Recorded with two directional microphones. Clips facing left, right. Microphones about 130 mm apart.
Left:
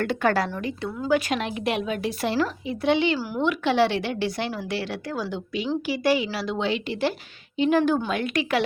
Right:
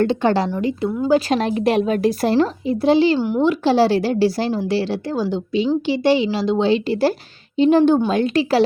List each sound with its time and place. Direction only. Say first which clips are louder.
0.0 s a woman's voice: right 6 dB; 25° right (ahead or behind)